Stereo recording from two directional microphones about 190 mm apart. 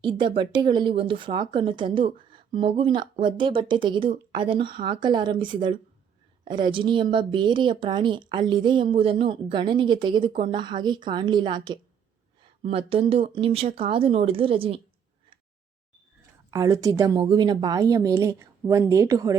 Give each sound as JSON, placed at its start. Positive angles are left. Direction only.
{"t": 0.0, "sound": "speech", "side_deg": -25}
{"t": 16.5, "sound": "speech", "side_deg": -20}